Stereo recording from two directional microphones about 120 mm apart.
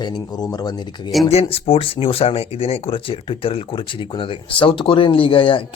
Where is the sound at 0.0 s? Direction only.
35° left (ahead or behind).